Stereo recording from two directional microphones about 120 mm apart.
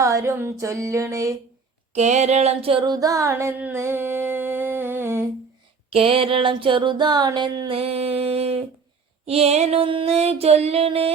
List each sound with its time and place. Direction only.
0.0 s a sound: 25° right (ahead or behind)
1.9 s music: 70° right (ahead or behind); by 3.5 s 25° right (ahead or behind)
3.6 s humming: 20° right (ahead or behind)
5.9 s music: 50° right (ahead or behind)